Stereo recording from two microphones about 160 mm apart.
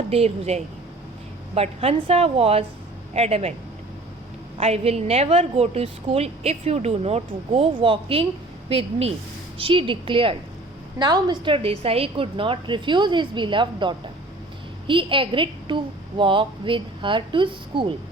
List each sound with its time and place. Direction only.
0.1 s a woman's voice: 40° right (ahead or behind)
4.5 s a woman's voice: 40° right (ahead or behind)